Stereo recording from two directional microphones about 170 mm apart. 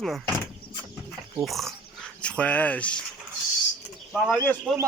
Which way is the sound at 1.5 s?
Centre (ahead or behind).